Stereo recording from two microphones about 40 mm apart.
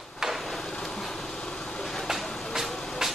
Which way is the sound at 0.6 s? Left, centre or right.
Centre.